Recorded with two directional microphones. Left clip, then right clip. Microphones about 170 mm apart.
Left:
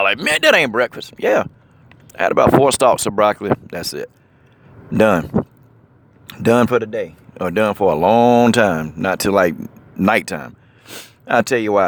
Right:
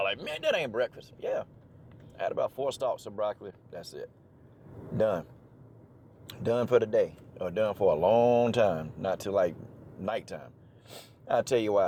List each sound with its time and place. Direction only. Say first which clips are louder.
0.2 s speech: left 16 dB; 55° left (ahead or behind)
6.3 s speech: left 11 dB; 40° left (ahead or behind)
7.4 s speech: left 11 dB; 45° left (ahead or behind)
11.3 s speech: left 11 dB; 35° left (ahead or behind)